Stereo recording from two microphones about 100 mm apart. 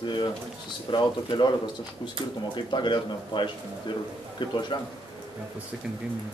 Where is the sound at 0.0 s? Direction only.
50° left (ahead or behind).